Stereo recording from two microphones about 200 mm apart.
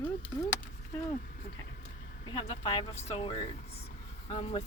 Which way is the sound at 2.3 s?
25° left (ahead or behind).